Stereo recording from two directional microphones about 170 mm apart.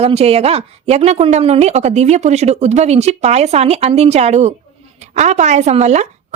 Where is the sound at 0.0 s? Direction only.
35° right (ahead or behind).